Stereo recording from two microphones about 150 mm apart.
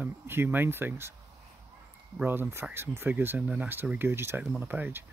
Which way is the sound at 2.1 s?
10° right (ahead or behind).